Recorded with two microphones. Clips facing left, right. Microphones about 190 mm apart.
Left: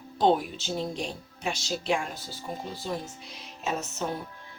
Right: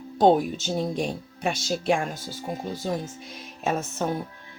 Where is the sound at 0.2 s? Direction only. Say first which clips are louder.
Right 5 dB; 45° right (ahead or behind).